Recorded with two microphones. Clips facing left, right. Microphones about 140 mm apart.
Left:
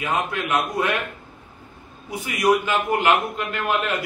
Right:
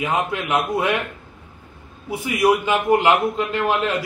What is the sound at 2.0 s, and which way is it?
A man's voice, 25° right (ahead or behind).